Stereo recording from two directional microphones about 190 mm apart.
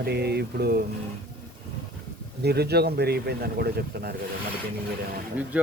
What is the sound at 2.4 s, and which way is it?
Speech, 60° right (ahead or behind).